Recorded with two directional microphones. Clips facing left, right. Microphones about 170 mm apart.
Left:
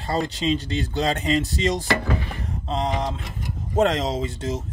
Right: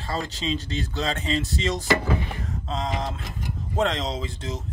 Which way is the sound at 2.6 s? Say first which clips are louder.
Left 4 dB; 35° left (ahead or behind).